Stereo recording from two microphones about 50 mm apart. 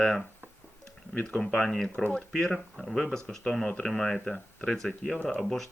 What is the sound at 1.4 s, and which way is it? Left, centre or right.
Speech, centre.